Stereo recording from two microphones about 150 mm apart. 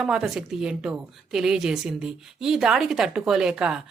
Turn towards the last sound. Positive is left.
turn(degrees=-5)  # may be behind; listen again after turning